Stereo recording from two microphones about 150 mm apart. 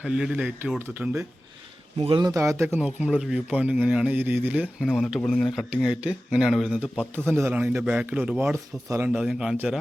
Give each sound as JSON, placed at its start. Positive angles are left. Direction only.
{"t": 0.0, "sound": "speech", "side_deg": -5}
{"t": 2.0, "sound": "a man's voice", "side_deg": -35}
{"t": 2.3, "sound": "speech", "side_deg": -20}
{"t": 2.7, "sound": "speech", "side_deg": -5}
{"t": 4.9, "sound": "speech", "side_deg": 5}
{"t": 8.5, "sound": "speech", "side_deg": -20}
{"t": 9.0, "sound": "speech", "side_deg": -5}